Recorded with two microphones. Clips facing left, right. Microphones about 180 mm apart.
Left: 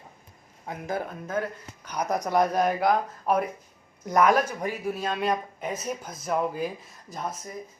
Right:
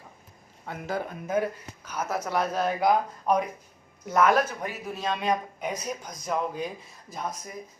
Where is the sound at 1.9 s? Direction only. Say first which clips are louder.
Left 3 dB; 15° left (ahead or behind).